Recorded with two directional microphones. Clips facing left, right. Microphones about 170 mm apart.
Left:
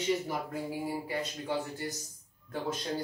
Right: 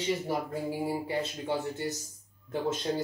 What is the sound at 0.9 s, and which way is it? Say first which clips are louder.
Speech: right 3 dB; 25° right (ahead or behind).